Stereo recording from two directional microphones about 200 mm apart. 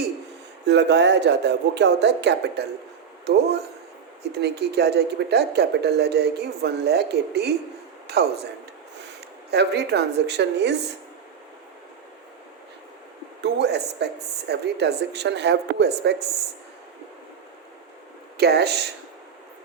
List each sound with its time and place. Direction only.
0.6 s a man's voice: 60° right (ahead or behind)
9.5 s speech: 55° right (ahead or behind)
13.4 s speech: 55° right (ahead or behind)
18.3 s speech: 55° right (ahead or behind)